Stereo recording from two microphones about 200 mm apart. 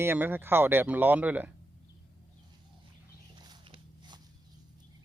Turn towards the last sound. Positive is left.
turn(degrees=-20)  # may be behind; listen again after turning